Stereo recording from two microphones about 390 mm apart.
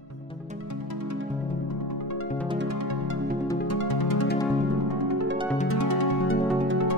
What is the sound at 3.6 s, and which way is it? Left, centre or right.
Music, left.